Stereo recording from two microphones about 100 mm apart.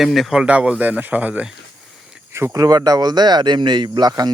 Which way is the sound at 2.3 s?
30° right (ahead or behind).